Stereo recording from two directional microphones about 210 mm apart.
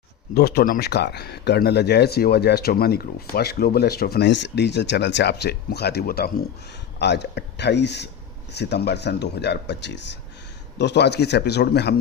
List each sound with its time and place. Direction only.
0.3 s speech: 50° left (ahead or behind)